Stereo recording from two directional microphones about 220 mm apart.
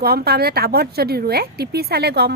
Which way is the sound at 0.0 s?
45° right (ahead or behind).